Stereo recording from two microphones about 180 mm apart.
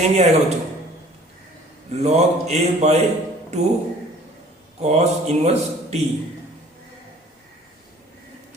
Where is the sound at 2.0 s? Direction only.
40° right (ahead or behind).